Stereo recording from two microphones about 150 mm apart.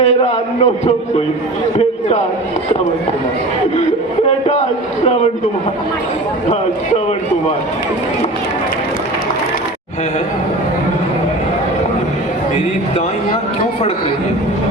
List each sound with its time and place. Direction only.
0.0 s a man's voice: 45° left (ahead or behind)